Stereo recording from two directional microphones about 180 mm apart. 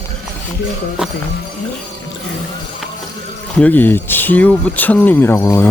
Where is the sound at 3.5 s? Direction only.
10° left (ahead or behind).